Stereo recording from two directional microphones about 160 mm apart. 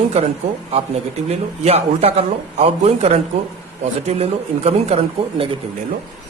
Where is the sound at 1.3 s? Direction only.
40° right (ahead or behind).